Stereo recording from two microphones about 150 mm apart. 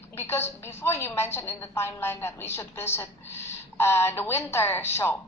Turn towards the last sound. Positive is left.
turn(degrees=15)  # may be behind; listen again after turning